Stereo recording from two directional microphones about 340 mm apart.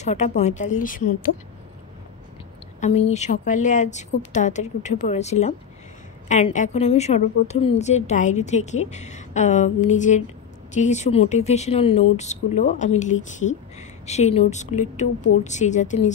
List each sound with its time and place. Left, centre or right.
0.0 s speech: centre
2.8 s speech: centre